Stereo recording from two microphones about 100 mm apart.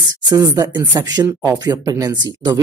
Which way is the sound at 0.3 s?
40° right (ahead or behind).